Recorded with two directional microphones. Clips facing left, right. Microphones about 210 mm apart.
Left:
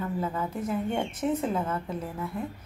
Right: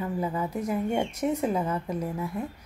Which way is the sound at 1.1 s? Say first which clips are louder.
Right 1 dB; centre (ahead or behind).